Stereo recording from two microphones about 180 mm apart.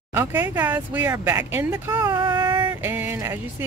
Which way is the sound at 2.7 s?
10° right (ahead or behind).